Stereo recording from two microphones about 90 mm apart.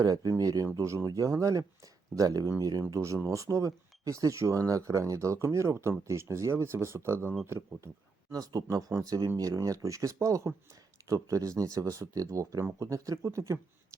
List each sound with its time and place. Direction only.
0.0 s speech: 40° right (ahead or behind)
8.3 s speech: 40° right (ahead or behind)